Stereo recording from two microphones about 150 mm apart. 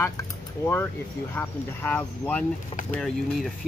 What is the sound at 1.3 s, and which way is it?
Speech, 15° left (ahead or behind).